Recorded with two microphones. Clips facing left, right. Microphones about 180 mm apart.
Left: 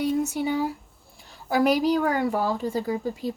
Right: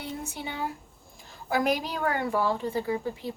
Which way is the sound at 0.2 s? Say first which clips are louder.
Left 10 dB; 40° left (ahead or behind).